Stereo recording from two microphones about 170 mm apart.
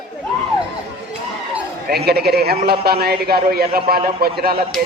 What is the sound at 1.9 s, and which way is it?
A man's voice, 70° right (ahead or behind).